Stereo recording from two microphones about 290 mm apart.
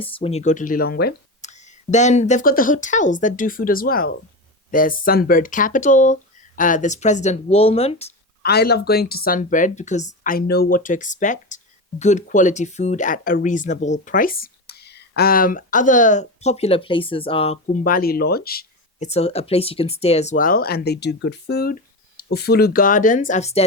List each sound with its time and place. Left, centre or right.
0.0 s speech: centre
8.4 s speech: left